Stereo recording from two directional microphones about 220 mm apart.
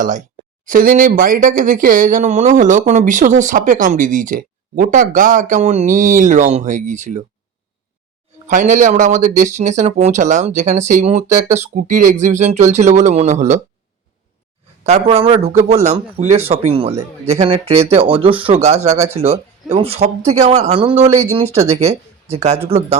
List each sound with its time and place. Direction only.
0.0 s speech: 35° right (ahead or behind)
8.4 s speech: 35° right (ahead or behind)
14.8 s speech: 30° right (ahead or behind)